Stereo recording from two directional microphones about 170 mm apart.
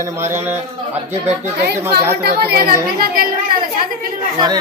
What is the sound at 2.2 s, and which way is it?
A woman's voice, 65° right (ahead or behind).